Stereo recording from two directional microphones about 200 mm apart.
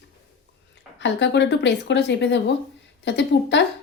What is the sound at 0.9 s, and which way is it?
A woman's voice, 60° left (ahead or behind).